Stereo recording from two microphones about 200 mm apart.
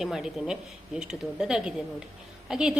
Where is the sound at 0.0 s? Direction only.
Centre (ahead or behind).